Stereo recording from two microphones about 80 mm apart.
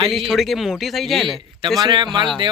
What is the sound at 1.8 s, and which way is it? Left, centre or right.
Speech, right.